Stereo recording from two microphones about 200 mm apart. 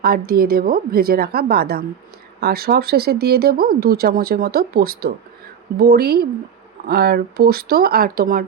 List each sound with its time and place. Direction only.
0.0 s speech: 50° right (ahead or behind)